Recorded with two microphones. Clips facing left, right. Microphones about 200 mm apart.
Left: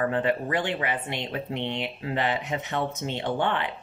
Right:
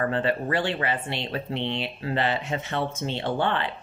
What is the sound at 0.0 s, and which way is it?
Speech, 15° left (ahead or behind).